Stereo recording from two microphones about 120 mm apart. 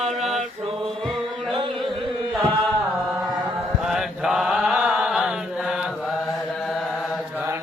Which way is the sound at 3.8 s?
5° right (ahead or behind).